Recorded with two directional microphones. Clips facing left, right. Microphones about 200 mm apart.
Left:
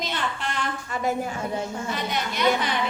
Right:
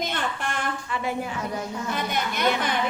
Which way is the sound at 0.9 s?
45° left (ahead or behind).